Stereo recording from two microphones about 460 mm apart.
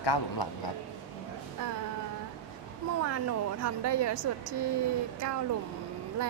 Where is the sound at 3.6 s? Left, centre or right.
Right.